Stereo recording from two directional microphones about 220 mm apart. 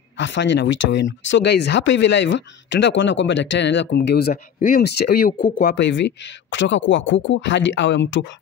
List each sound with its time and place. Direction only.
0.2 s speech: 55° left (ahead or behind)